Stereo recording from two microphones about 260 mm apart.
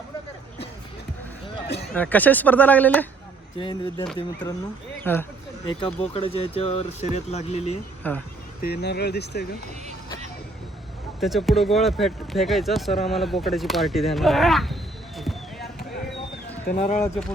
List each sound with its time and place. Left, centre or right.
1.9 s speech: centre
3.6 s speech: centre
5.1 s speech: centre
5.6 s speech: left
8.0 s speech: centre
8.6 s speech: left
11.2 s speech: centre
13.4 s a sound: centre
16.6 s speech: left
17.0 s speech: centre